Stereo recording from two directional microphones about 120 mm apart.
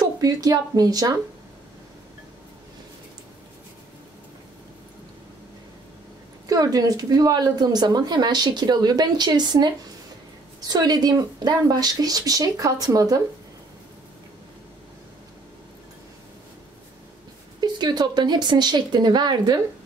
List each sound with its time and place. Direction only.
0.2 s speech: 30° right (ahead or behind)
6.4 s speech: 30° right (ahead or behind)
17.6 s speech: 35° right (ahead or behind)